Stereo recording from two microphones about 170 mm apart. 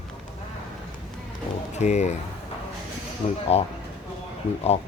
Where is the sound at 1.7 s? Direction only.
40° left (ahead or behind).